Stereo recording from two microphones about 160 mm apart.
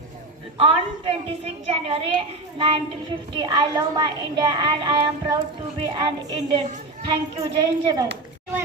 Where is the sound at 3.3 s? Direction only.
30° right (ahead or behind).